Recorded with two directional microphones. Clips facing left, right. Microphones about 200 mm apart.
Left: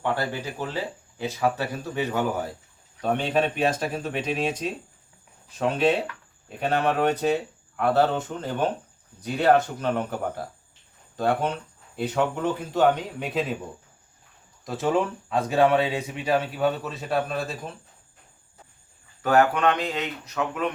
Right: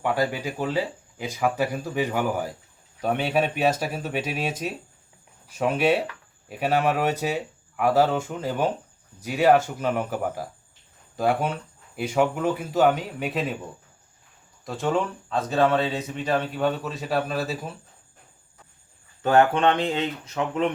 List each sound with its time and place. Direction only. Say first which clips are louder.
0.0 s speech: right 3 dB; 10° right (ahead or behind)
14.6 s speech: left 1 dB; centre (ahead or behind)
19.2 s speech: right 1 dB; 25° right (ahead or behind)